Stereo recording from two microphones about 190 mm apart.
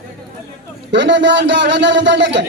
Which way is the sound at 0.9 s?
70° right (ahead or behind).